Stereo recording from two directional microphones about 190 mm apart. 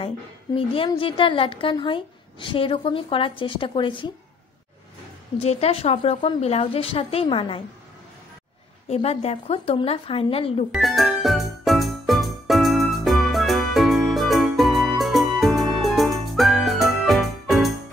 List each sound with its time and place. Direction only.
0.6 s a woman's voice: 30° left (ahead or behind)
5.4 s a woman's voice: 35° left (ahead or behind)
8.8 s a woman's voice: 30° left (ahead or behind)
10.7 s music: centre (ahead or behind)